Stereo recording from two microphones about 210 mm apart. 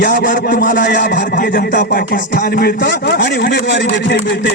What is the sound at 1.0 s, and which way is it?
Speech, 55° left (ahead or behind).